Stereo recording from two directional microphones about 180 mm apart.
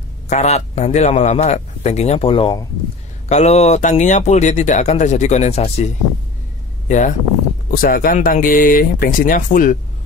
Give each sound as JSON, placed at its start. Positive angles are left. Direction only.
{"t": 0.3, "sound": "speech", "side_deg": 40}
{"t": 6.9, "sound": "speech", "side_deg": 45}